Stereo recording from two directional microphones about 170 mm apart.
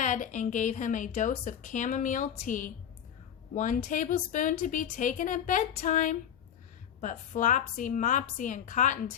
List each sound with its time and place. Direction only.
0.0 s a woman's voice: 50° left (ahead or behind)